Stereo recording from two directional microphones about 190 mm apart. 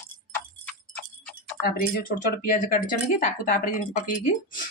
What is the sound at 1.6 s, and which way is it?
Speech, 50° left (ahead or behind).